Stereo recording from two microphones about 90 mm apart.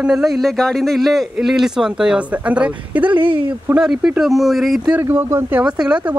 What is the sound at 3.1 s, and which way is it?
Speech, 70° right (ahead or behind).